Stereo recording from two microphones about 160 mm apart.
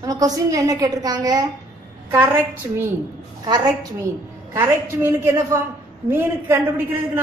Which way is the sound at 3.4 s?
25° right (ahead or behind).